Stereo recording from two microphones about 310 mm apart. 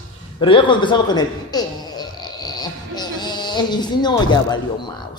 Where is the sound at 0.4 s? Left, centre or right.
Centre.